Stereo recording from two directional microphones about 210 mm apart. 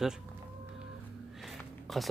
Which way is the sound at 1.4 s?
Centre (ahead or behind).